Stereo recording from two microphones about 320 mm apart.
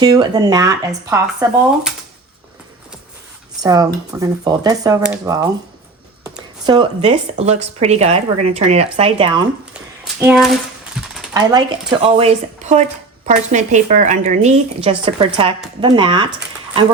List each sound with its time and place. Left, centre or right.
0.0 s speech: centre
3.6 s speech: centre
9.7 s a sound: centre
11.2 s speech: centre